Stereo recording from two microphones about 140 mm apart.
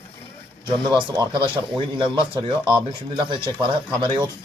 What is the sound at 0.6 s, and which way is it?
Speech, 35° right (ahead or behind).